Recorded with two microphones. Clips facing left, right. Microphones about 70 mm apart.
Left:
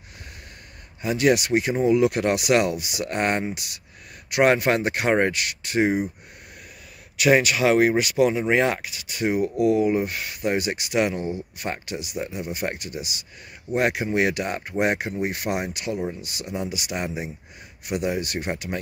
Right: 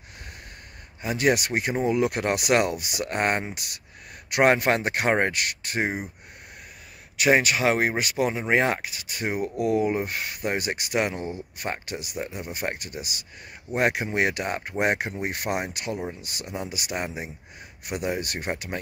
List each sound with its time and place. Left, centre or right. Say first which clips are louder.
1.0 s speech: left 3 dB; right
7.2 s speech: left 2 dB; right